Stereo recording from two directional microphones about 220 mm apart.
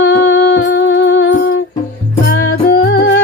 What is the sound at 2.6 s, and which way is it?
Music, 45° left (ahead or behind).